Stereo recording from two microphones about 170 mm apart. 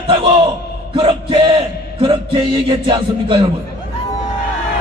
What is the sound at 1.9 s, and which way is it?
A man's voice, 30° right (ahead or behind).